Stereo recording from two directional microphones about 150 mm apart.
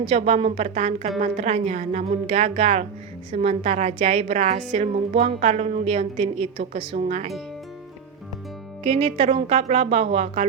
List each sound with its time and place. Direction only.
0.1 s a woman's voice: 45° right (ahead or behind)
8.8 s a woman's voice: 45° right (ahead or behind)